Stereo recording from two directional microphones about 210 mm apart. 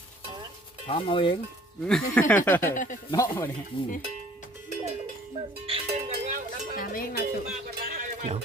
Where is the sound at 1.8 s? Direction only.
5° left (ahead or behind).